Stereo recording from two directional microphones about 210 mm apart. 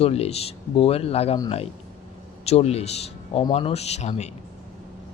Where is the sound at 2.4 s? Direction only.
30° left (ahead or behind).